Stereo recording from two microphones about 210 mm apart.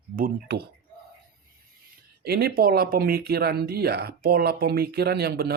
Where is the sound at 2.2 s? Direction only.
50° right (ahead or behind).